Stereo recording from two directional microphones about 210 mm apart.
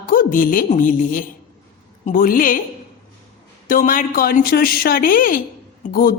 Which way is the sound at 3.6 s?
40° left (ahead or behind).